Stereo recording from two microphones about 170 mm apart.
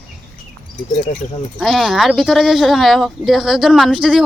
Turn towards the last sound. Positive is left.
turn(degrees=0)  # may be behind; listen again after turning